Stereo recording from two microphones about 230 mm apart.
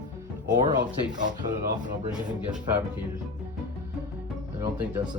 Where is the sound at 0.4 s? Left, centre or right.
Centre.